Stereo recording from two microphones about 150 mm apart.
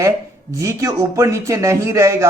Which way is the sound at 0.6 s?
20° right (ahead or behind).